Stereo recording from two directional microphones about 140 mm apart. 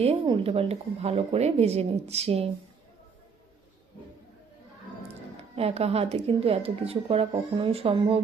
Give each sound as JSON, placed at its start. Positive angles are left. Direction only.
{"t": 0.0, "sound": "speech", "side_deg": -45}
{"t": 5.4, "sound": "speech", "side_deg": -45}